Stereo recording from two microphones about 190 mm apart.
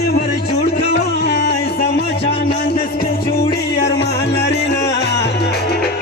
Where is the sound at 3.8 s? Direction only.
60° left (ahead or behind).